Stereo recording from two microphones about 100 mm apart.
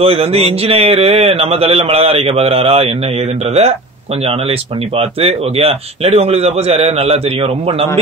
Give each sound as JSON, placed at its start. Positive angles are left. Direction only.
{"t": 0.0, "sound": "speech", "side_deg": -90}
{"t": 4.2, "sound": "speech", "side_deg": -80}